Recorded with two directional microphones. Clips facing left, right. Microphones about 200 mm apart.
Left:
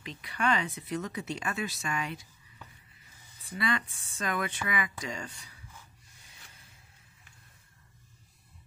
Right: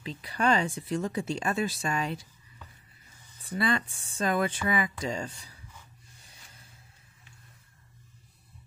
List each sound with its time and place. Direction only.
0.0 s speech: 35° right (ahead or behind)
3.5 s speech: 30° right (ahead or behind)